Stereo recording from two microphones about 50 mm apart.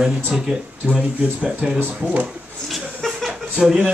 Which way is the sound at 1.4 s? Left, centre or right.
Right.